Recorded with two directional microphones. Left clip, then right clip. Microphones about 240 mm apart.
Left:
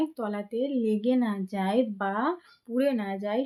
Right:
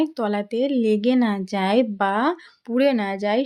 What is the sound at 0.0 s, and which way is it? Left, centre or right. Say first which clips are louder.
A woman's voice: right 8 dB; right.